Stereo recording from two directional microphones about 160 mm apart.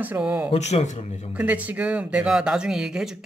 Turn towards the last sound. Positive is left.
turn(degrees=-5)  # may be behind; listen again after turning